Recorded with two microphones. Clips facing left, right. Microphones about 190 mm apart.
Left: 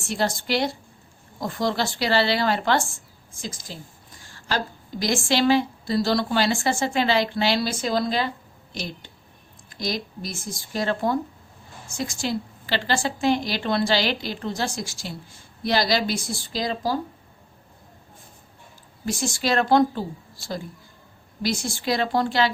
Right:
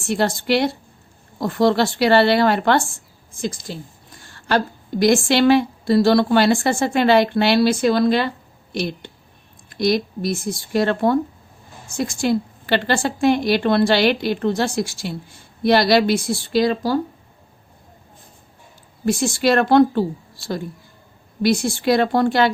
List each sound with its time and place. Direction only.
0.1 s a woman's voice: 60° right (ahead or behind)
19.0 s a woman's voice: 60° right (ahead or behind)
21.4 s a woman's voice: 60° right (ahead or behind)